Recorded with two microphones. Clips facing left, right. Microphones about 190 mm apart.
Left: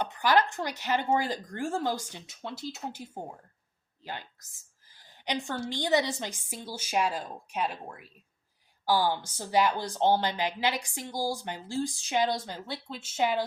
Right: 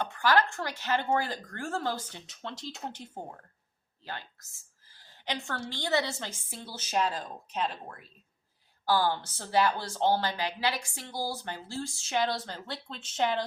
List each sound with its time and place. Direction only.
0.0 s speech: 15° left (ahead or behind)
4.0 s a sound: 15° left (ahead or behind)
5.5 s speech: 15° left (ahead or behind)